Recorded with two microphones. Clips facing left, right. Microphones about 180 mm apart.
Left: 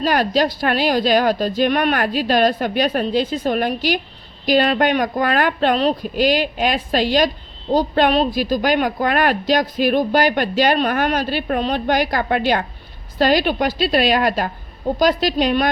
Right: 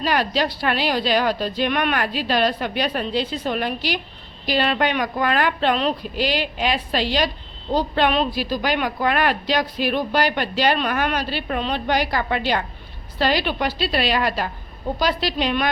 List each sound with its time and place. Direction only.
0.0 s a woman's voice: 45° left (ahead or behind)